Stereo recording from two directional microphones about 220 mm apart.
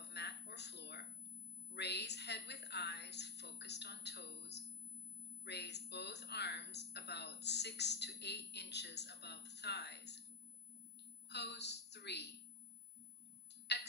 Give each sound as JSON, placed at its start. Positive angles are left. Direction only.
{"t": 0.1, "sound": "a sound", "side_deg": 50}
{"t": 1.7, "sound": "a woman's voice", "side_deg": 50}
{"t": 11.2, "sound": "a woman's voice", "side_deg": 50}
{"t": 13.7, "sound": "tick-tock", "side_deg": 50}